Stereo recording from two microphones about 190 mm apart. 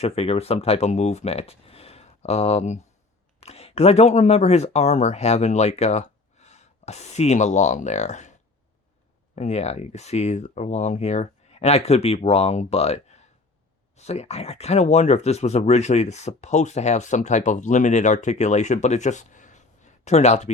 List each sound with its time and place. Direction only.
0.0 s speech: 30° left (ahead or behind)